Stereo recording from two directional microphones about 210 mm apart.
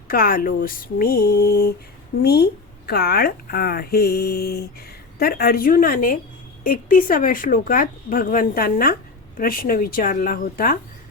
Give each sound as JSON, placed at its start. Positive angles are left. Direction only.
{"t": 0.1, "sound": "speech", "side_deg": 45}